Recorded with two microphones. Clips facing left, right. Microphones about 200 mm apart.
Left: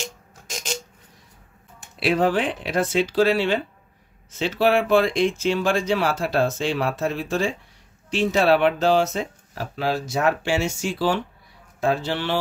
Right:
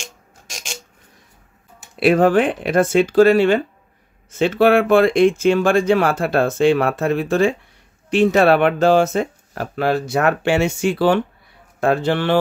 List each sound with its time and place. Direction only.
2.0 s speech: 50° right (ahead or behind)